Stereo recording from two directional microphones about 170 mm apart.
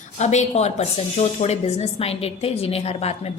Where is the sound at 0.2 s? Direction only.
40° left (ahead or behind).